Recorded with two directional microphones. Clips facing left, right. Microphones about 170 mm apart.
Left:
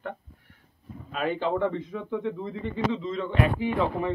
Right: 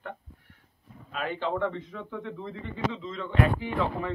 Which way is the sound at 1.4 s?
15° left (ahead or behind).